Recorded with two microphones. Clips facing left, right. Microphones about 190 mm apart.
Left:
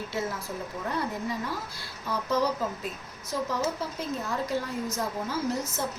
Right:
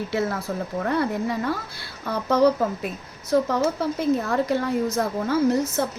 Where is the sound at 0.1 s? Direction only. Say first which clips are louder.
Right 7 dB; 65° right (ahead or behind).